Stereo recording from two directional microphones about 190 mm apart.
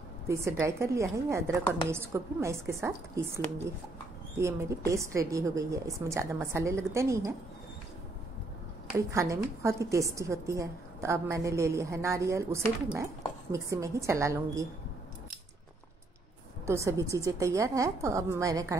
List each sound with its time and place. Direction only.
0.3 s a woman's voice: 15° right (ahead or behind)
4.4 s a woman's voice: 15° right (ahead or behind)
8.9 s a woman's voice: 15° right (ahead or behind)
16.6 s a woman's voice: 15° right (ahead or behind)